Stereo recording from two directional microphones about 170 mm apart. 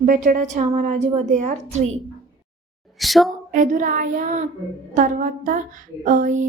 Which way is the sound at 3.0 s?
Centre (ahead or behind).